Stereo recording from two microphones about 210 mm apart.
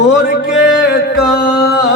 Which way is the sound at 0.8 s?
50° left (ahead or behind).